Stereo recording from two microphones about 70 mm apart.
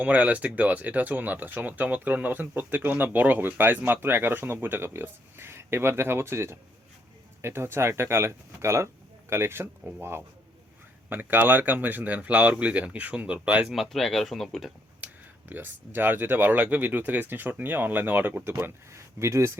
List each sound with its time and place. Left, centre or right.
0.0 s speech: centre
13.7 s speech: centre
15.0 s speech: right